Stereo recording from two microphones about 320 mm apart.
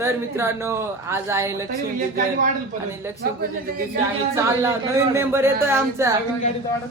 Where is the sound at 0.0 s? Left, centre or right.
Centre.